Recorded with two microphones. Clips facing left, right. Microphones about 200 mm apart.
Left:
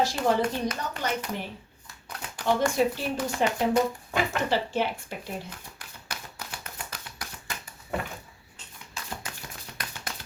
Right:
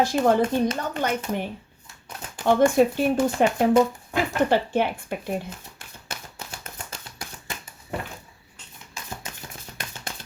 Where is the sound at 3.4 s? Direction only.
55° right (ahead or behind).